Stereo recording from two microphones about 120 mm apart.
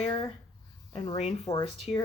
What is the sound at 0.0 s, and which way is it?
Speech, 45° left (ahead or behind).